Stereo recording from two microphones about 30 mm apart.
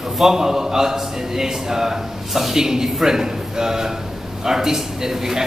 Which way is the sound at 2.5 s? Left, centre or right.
Centre.